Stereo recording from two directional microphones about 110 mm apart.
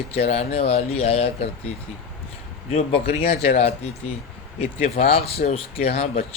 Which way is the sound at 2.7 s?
70° left (ahead or behind).